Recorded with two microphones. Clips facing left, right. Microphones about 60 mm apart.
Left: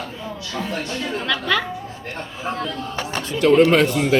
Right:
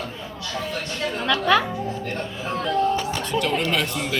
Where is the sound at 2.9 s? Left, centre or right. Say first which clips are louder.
Right 2 dB; left.